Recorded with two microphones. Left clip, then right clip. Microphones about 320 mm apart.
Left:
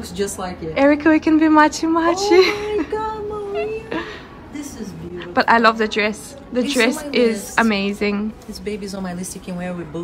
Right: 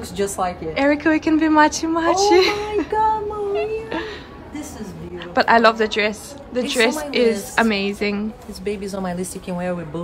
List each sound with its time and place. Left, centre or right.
0.7 s a woman's voice: centre
3.5 s whimper: centre
5.3 s a woman's voice: centre
8.6 s a woman's voice: right